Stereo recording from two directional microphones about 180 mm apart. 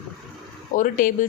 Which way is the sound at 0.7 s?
50° left (ahead or behind).